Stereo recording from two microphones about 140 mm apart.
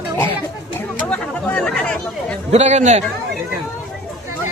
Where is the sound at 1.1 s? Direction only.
5° left (ahead or behind).